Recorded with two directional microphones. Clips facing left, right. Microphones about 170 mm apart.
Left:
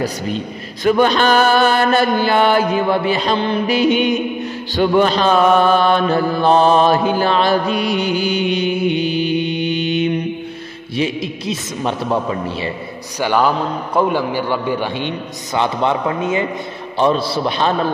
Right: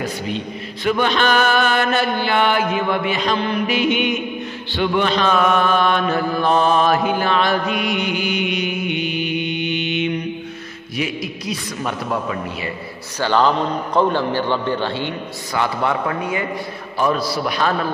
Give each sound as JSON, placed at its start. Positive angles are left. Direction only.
{"t": 0.8, "sound": "chant", "side_deg": 40}
{"t": 4.7, "sound": "mantra", "side_deg": 40}
{"t": 11.0, "sound": "a man's voice", "side_deg": 25}
{"t": 13.2, "sound": "a man's voice", "side_deg": 10}